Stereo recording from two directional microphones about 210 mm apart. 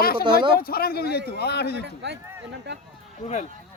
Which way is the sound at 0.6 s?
45° left (ahead or behind).